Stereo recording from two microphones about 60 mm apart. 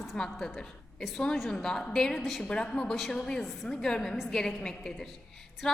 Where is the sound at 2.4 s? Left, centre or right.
Centre.